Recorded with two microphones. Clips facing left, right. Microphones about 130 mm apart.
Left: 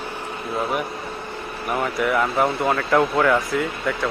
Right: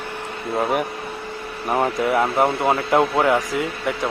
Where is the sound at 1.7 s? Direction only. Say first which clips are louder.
Right 2 dB; 30° right (ahead or behind).